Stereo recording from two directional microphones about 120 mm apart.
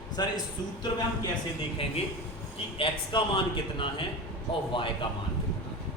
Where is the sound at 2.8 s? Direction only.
45° left (ahead or behind).